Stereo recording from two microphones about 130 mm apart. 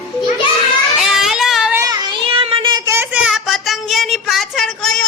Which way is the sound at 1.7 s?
25° right (ahead or behind).